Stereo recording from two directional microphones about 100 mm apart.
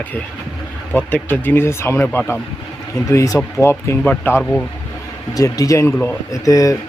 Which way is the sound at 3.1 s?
35° left (ahead or behind).